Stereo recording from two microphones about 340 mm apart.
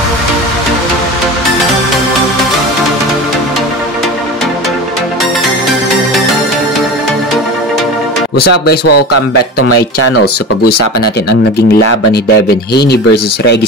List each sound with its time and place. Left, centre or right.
5.7 s music: centre
8.8 s speech: left
12.7 s speech: left